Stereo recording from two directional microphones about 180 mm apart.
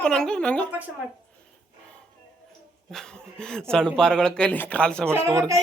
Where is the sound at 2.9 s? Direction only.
5° left (ahead or behind).